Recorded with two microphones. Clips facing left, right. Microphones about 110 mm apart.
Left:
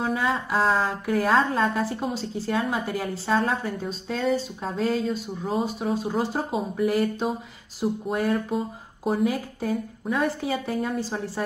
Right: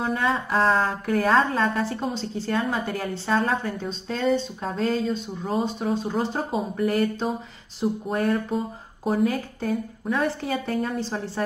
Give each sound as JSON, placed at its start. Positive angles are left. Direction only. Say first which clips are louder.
{"t": 0.0, "sound": "a woman's voice", "louder": "right 1 dB", "side_deg": 5}